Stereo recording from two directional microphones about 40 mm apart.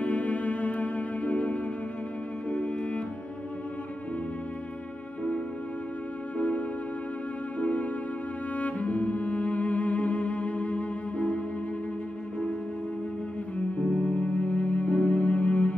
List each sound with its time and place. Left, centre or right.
0.0 s music: left
6.3 s music: left
13.6 s music: left